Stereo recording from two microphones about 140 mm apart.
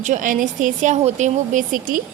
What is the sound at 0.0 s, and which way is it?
Speech, 65° right (ahead or behind).